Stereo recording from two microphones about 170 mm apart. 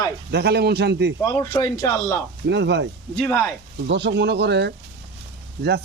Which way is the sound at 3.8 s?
90° right.